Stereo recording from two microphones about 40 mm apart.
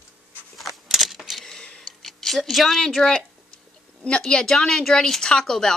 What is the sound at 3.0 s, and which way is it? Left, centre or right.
Speech, centre.